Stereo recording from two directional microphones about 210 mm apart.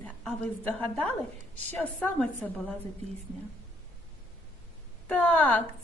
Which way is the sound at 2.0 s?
5° left (ahead or behind).